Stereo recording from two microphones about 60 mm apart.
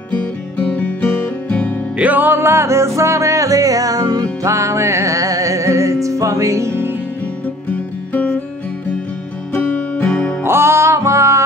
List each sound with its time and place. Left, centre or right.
0.1 s music: left
2.0 s music: right
9.5 s music: left
10.4 s music: right